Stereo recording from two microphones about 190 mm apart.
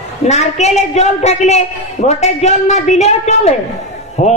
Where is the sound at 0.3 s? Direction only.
35° left (ahead or behind).